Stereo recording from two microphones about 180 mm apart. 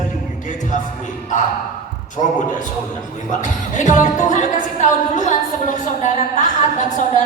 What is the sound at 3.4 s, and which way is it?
A woman's voice, 45° left (ahead or behind).